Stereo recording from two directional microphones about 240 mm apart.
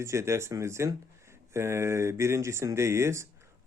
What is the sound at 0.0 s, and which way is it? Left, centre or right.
Mantra, centre.